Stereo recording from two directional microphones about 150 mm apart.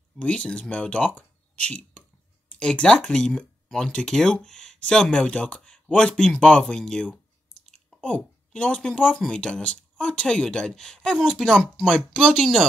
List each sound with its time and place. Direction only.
0.2 s speech: 10° left (ahead or behind)